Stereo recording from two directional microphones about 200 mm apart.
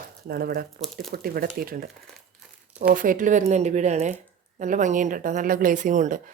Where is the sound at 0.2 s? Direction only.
50° right (ahead or behind).